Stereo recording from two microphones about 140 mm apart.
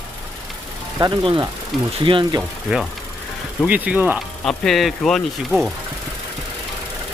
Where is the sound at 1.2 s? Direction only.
35° right (ahead or behind).